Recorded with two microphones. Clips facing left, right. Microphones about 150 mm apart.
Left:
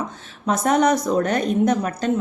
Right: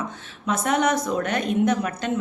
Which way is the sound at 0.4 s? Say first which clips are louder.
Left 4 dB; 40° left (ahead or behind).